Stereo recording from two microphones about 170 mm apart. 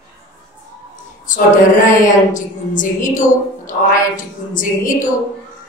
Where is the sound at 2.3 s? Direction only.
50° left (ahead or behind).